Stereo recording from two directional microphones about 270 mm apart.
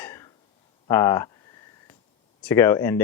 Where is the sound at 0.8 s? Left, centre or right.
Centre.